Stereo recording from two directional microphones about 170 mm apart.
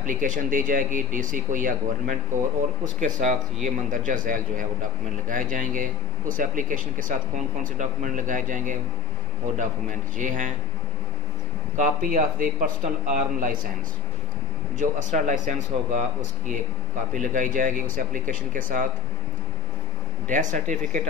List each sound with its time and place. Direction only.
0.0 s a man's voice: 50° right (ahead or behind)
11.7 s a man's voice: 50° right (ahead or behind)
14.8 s a man's voice: 50° right (ahead or behind)
20.2 s a man's voice: 50° right (ahead or behind)